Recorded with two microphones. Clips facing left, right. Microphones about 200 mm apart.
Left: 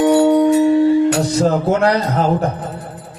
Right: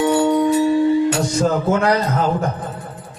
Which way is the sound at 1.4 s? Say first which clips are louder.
Left 2 dB; 35° left (ahead or behind).